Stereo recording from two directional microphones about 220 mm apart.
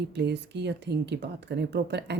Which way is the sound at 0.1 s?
50° right (ahead or behind).